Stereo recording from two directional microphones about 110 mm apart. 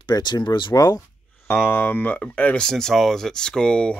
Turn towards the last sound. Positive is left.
turn(degrees=10)  # may be behind; listen again after turning